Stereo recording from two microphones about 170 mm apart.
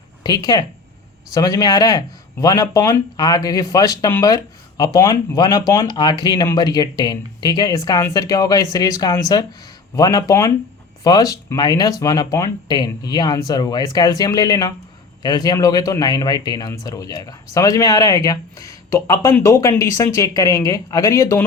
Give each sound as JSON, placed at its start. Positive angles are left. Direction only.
{"t": 0.2, "sound": "speech", "side_deg": 25}